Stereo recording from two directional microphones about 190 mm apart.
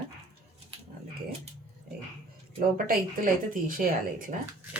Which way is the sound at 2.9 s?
45° right (ahead or behind).